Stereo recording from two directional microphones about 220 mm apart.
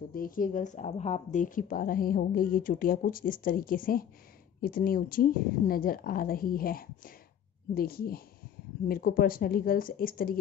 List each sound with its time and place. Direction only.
0.1 s a woman's voice: 40° left (ahead or behind)